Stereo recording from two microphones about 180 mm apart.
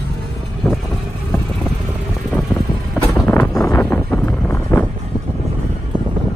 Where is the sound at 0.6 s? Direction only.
15° left (ahead or behind).